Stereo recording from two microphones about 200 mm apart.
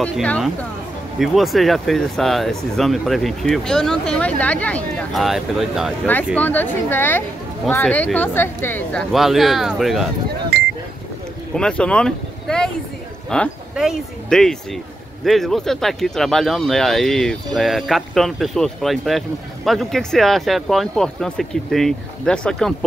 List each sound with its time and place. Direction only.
0.0 s a man's voice: 5° left (ahead or behind)
9.1 s a man's voice: centre (ahead or behind)
10.5 s a sound: 60° right (ahead or behind)
11.5 s a man's voice: 5° left (ahead or behind)